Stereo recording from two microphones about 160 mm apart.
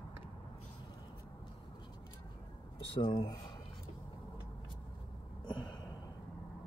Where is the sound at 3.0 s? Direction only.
25° left (ahead or behind).